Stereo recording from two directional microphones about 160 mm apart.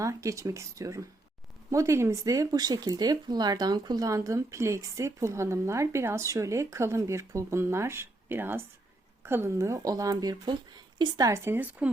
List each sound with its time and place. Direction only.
0.0 s speech: 20° right (ahead or behind)